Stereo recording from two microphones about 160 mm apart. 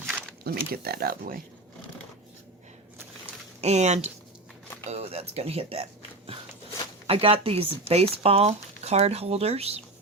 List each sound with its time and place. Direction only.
0.4 s speech: 70° right (ahead or behind)
3.6 s speech: 45° right (ahead or behind)